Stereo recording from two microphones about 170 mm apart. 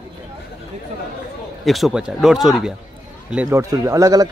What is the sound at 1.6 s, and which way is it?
Speech, centre (ahead or behind).